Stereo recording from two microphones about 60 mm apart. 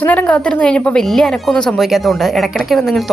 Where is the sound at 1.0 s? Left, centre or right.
Centre.